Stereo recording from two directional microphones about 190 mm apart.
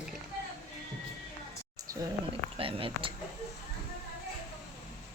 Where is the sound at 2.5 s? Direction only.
30° right (ahead or behind).